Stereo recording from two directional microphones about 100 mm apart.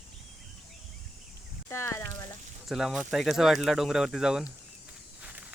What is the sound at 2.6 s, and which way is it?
Speech, centre (ahead or behind).